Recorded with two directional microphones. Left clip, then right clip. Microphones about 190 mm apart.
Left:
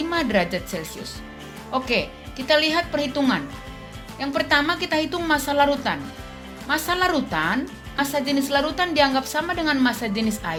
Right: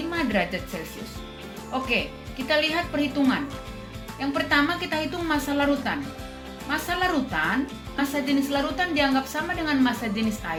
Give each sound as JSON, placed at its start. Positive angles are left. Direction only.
{"t": 0.1, "sound": "speech", "side_deg": 70}
{"t": 1.7, "sound": "a woman's voice", "side_deg": 75}